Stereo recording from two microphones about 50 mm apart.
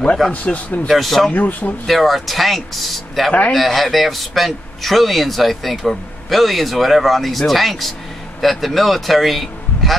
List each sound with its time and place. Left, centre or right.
0.3 s a man's voice: left
0.8 s a man's voice: centre
1.3 s speech: left
1.9 s a man's voice: centre